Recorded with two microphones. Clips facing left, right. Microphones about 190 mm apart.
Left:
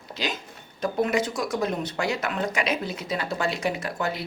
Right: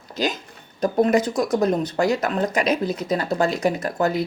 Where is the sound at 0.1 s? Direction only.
45° right (ahead or behind).